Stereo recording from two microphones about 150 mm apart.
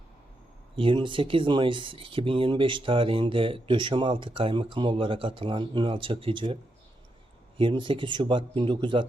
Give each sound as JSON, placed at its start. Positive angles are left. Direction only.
{"t": 0.8, "sound": "speech", "side_deg": -35}
{"t": 7.6, "sound": "speech", "side_deg": -35}